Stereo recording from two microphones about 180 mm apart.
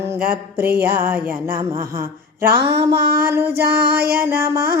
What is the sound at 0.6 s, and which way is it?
Female singing, 60° right (ahead or behind).